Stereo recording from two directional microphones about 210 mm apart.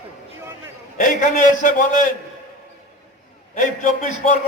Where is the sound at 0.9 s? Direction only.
40° left (ahead or behind).